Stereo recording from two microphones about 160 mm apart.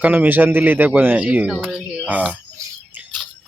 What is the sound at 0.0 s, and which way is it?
Speech, 10° right (ahead or behind).